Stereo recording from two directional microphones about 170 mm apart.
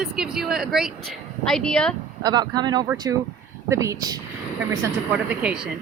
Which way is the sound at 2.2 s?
25° right (ahead or behind).